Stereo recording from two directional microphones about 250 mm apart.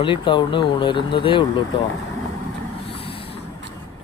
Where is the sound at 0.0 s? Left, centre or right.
Centre.